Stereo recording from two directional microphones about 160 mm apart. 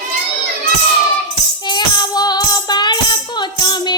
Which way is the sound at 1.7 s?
25° left (ahead or behind).